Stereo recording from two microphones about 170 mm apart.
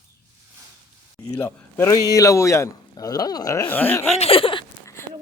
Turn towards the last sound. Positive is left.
turn(degrees=30)  # may be behind; listen again after turning